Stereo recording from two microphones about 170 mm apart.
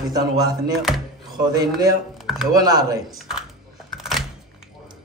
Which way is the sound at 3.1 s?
Centre (ahead or behind).